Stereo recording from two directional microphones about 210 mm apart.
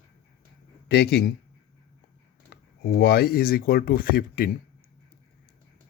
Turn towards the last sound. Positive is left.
turn(degrees=45)  # may be behind; listen again after turning